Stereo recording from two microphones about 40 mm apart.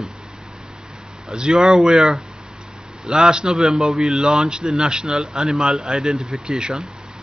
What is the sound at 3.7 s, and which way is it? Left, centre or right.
Speech, centre.